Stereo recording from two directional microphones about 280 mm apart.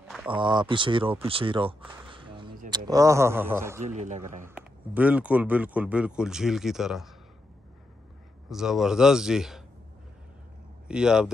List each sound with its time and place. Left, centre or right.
0.3 s speech: centre
3.8 s a man's voice: right
4.4 s speech: centre
8.5 s speech: centre
10.9 s speech: centre